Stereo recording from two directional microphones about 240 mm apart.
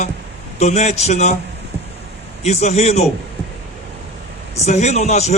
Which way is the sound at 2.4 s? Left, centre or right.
Left.